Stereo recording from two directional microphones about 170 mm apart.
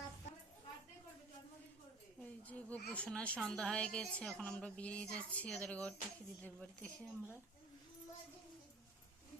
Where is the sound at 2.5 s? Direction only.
10° left (ahead or behind).